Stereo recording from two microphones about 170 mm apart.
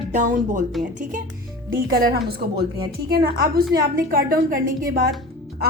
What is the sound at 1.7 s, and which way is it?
A woman's voice, 65° right (ahead or behind).